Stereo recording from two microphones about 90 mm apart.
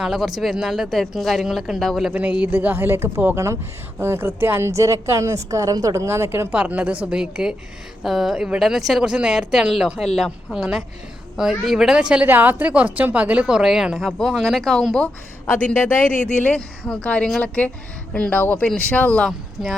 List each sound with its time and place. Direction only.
0.0 s speech: 5° right (ahead or behind)
2.0 s a woman's voice: 15° right (ahead or behind)
6.5 s speech: 15° right (ahead or behind); by 15.0 s 5° left (ahead or behind)
16.2 s speech: 10° left (ahead or behind)
19.6 s speech: centre (ahead or behind)